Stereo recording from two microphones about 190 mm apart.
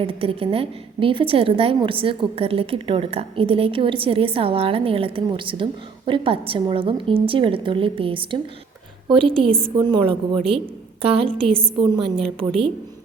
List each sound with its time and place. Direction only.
0.0 s a woman's voice: 30° right (ahead or behind)
9.5 s a woman's voice: 5° left (ahead or behind)
9.7 s a woman's voice: 25° right (ahead or behind)